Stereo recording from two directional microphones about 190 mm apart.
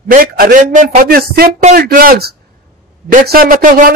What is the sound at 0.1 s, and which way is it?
A man's voice, 50° right (ahead or behind).